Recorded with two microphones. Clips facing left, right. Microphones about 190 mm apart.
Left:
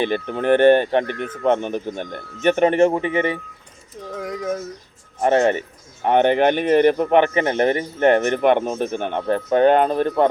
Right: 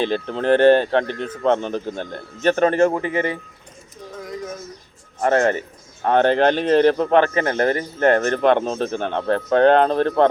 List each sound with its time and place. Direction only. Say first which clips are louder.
0.0 s speech: even; 15° left (ahead or behind)
4.2 s a sound: left 2 dB; 75° left (ahead or behind)
5.2 s speech: left 1 dB; 20° left (ahead or behind)